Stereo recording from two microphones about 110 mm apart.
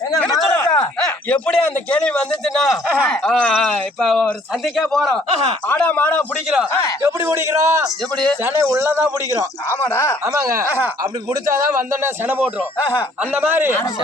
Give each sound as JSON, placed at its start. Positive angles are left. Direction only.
{"t": 0.5, "sound": "a sound", "side_deg": 25}
{"t": 1.3, "sound": "a man's voice", "side_deg": 10}
{"t": 5.6, "sound": "a man's voice", "side_deg": 15}
{"t": 7.0, "sound": "a man's voice", "side_deg": -25}
{"t": 8.1, "sound": "a man's voice", "side_deg": 10}
{"t": 8.4, "sound": "a man's voice", "side_deg": -25}
{"t": 9.9, "sound": "speech", "side_deg": 25}
{"t": 10.2, "sound": "a man's voice", "side_deg": -25}
{"t": 12.0, "sound": "a man's voice", "side_deg": -20}
{"t": 13.5, "sound": "a man's voice", "side_deg": -20}